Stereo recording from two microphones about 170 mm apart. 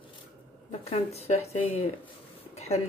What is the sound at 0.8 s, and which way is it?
A woman's voice, 35° left (ahead or behind).